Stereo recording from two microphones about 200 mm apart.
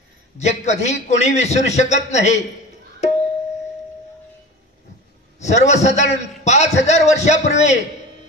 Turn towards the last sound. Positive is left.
turn(degrees=35)  # may be behind; listen again after turning